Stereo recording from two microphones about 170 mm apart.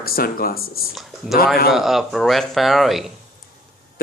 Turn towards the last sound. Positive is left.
turn(degrees=0)  # may be behind; listen again after turning